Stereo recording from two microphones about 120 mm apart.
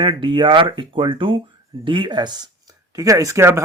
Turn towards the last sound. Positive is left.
turn(degrees=-20)  # may be behind; listen again after turning